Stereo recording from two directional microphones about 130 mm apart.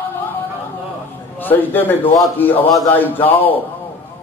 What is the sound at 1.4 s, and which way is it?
A man's voice, 15° left (ahead or behind).